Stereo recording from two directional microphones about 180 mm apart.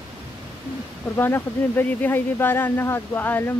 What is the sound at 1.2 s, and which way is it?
Speech, 10° left (ahead or behind).